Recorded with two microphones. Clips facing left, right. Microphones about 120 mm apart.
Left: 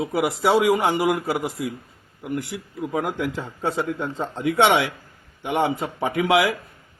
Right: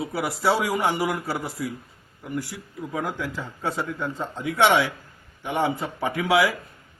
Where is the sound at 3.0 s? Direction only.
60° left (ahead or behind).